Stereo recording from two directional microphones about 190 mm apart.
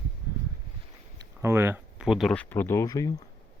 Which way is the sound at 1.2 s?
15° right (ahead or behind).